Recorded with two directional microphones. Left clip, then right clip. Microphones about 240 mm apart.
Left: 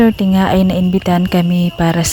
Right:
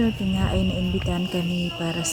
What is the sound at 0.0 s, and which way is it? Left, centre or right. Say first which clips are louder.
Speech: left 13 dB; left.